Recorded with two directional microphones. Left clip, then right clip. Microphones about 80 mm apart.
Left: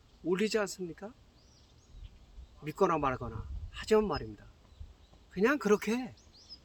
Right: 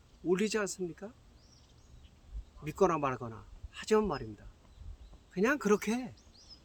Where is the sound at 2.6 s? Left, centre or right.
Centre.